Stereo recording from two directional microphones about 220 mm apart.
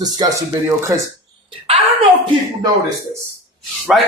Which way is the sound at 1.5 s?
25° right (ahead or behind).